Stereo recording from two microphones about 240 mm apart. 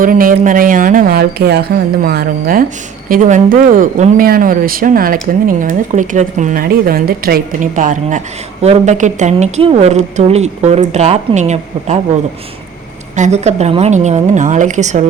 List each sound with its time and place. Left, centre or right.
0.0 s a woman's voice: right
13.1 s a woman's voice: right